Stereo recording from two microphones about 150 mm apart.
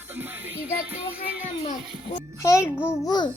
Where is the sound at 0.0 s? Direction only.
15° right (ahead or behind).